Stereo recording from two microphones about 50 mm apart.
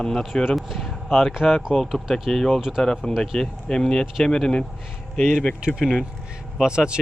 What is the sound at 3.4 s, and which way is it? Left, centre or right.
Speech, centre.